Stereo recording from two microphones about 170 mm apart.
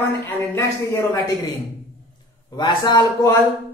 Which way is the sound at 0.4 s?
20° left (ahead or behind).